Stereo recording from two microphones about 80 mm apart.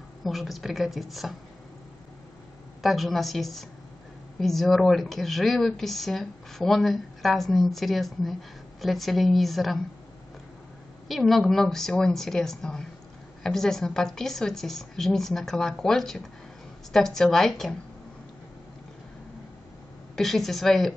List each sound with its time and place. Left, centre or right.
0.2 s speech: centre
2.8 s speech: centre
11.1 s speech: centre
20.2 s speech: centre